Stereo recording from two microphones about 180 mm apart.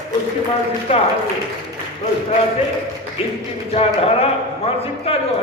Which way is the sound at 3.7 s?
35° left (ahead or behind).